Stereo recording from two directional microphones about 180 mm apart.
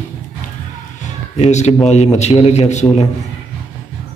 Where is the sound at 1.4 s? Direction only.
40° left (ahead or behind).